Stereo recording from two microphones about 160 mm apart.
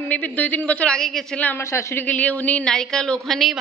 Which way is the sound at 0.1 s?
10° left (ahead or behind).